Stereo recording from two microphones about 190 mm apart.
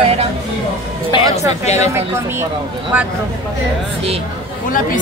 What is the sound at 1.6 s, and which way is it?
Speech, 35° left (ahead or behind).